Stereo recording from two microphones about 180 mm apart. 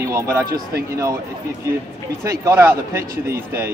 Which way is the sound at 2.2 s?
15° right (ahead or behind).